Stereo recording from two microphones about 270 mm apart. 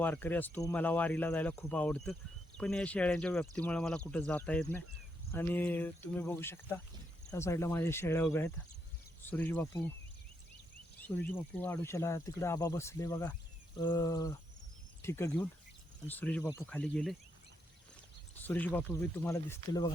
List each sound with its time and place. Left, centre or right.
0.0 s speech: centre
11.0 s speech: centre
18.4 s speech: centre